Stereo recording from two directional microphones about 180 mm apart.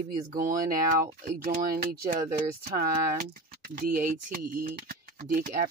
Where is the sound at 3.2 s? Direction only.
50° right (ahead or behind).